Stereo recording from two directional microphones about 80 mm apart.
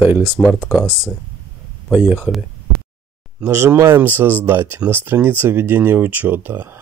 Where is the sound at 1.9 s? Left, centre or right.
Centre.